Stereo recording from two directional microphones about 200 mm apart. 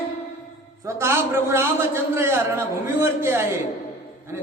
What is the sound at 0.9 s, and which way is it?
A man's voice, 15° right (ahead or behind).